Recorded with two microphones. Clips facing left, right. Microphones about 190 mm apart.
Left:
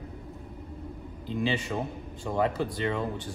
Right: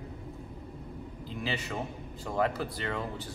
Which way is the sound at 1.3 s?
25° left (ahead or behind).